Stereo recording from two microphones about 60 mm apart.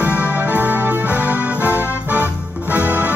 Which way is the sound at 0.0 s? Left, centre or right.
Right.